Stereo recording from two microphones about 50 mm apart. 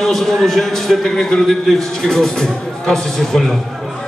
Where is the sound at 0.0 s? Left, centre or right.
Centre.